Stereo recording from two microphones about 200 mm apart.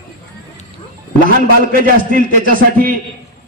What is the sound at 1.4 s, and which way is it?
A man's voice, 45° right (ahead or behind).